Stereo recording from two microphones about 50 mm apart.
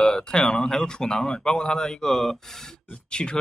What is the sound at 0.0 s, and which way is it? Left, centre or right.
Speech, centre.